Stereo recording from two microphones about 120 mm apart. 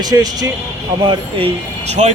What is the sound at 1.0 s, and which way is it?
Speech, 45° right (ahead or behind).